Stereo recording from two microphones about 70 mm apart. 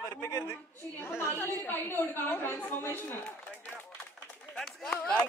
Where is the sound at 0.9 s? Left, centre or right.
Left.